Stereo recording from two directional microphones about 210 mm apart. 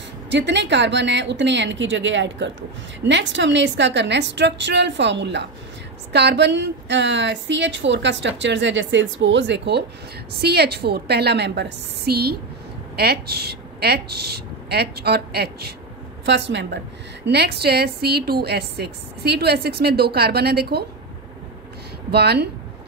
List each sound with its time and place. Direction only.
0.3 s a woman's voice: 55° right (ahead or behind)
22.1 s a woman's voice: 50° right (ahead or behind)